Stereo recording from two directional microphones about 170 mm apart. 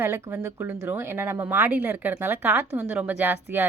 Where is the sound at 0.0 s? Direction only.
15° right (ahead or behind).